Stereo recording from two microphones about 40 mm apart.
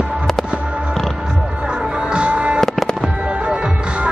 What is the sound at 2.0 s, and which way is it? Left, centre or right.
Music, right.